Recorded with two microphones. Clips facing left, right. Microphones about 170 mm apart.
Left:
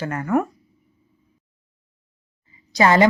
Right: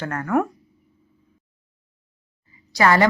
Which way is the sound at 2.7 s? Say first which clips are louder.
Left 2 dB; 20° left (ahead or behind).